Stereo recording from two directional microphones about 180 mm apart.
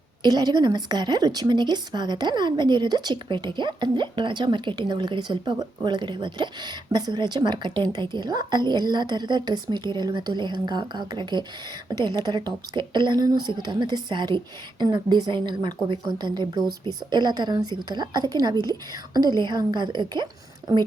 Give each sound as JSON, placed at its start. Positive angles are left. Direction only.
{"t": 0.2, "sound": "a woman's voice", "side_deg": -25}